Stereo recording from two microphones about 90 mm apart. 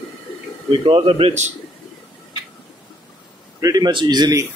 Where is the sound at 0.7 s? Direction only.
80° right.